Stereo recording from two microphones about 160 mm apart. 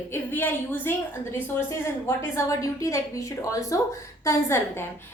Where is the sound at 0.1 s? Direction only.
15° left (ahead or behind).